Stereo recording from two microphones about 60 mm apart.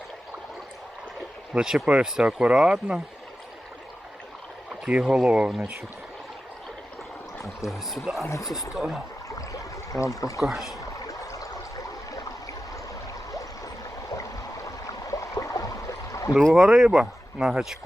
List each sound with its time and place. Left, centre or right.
1.5 s speech: centre
4.9 s speech: centre
7.6 s speech: centre
9.3 s a sound: left
10.4 s speech: centre
10.8 s stream: left
14.2 s a sound: left
16.5 s speech: centre